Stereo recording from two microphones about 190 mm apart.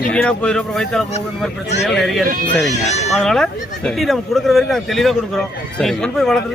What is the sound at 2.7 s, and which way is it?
Speech, 35° left (ahead or behind).